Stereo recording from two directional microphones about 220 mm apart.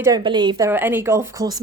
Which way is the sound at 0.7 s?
10° right (ahead or behind).